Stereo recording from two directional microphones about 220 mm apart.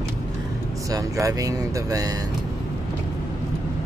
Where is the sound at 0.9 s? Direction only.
15° right (ahead or behind).